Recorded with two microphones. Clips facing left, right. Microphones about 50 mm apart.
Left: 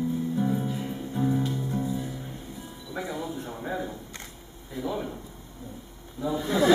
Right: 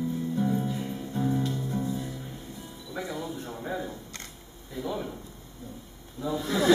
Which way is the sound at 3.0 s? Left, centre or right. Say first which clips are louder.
Left 1 dB; centre.